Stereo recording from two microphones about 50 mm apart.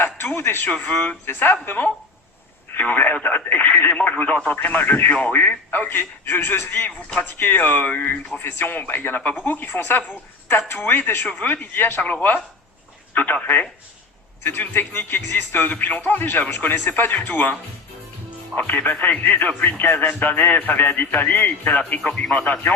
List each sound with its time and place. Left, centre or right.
0.0 s a sound: left
0.7 s speech: left
1.3 s speech: left
8.4 s speech: left
13.3 s speech: left
14.4 s speech: left
15.7 s speech: left